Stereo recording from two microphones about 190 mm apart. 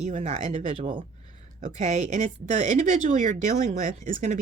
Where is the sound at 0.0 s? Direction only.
35° right (ahead or behind).